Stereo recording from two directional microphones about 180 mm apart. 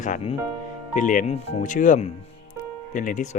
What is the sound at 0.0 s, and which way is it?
Speech, 40° left (ahead or behind).